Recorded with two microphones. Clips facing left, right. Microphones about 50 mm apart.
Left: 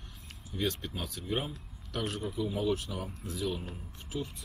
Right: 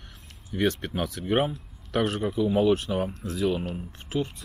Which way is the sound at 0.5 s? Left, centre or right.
Right.